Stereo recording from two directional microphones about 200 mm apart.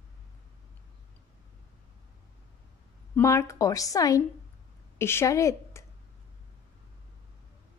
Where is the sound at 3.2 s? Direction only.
15° left (ahead or behind).